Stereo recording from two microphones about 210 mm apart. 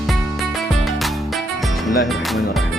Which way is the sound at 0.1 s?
Centre (ahead or behind).